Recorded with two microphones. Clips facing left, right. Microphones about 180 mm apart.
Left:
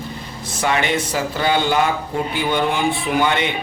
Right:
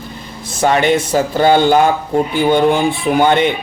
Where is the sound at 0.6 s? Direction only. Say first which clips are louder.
Right 7 dB; 40° right (ahead or behind).